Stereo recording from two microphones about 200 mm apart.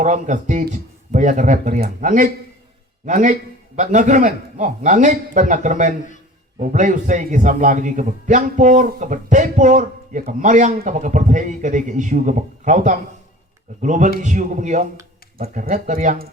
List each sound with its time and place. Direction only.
0.0 s a man's voice: 40° right (ahead or behind)